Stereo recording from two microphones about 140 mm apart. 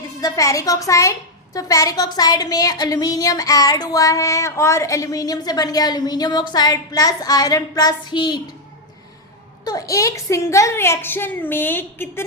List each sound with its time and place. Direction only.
0.2 s speech: 25° left (ahead or behind)
9.6 s a woman's voice: 25° left (ahead or behind)